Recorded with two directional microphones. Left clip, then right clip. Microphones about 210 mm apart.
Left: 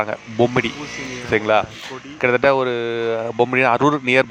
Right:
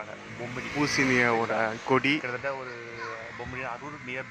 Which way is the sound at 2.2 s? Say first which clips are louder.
Left 17 dB; 45° left (ahead or behind).